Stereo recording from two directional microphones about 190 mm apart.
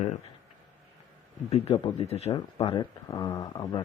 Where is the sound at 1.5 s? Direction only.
35° left (ahead or behind).